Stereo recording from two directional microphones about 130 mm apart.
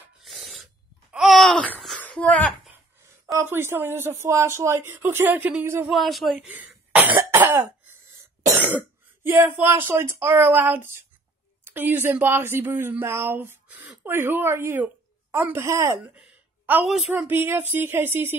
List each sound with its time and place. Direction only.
0.2 s sneeze: centre (ahead or behind)
1.1 s a sound: centre (ahead or behind)
3.3 s speech: 20° right (ahead or behind)
5.9 s speech: centre (ahead or behind)
6.4 s speech: 15° right (ahead or behind)
6.7 s cough: 10° right (ahead or behind)
8.6 s speech: 15° right (ahead or behind)
16.2 s a sound: 10° right (ahead or behind)
17.1 s speech: 15° right (ahead or behind)